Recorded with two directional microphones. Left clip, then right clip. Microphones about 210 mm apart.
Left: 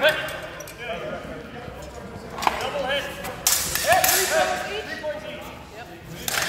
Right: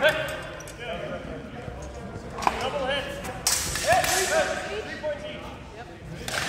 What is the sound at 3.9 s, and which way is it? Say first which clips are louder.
Whip: left 2 dB; 20° left (ahead or behind).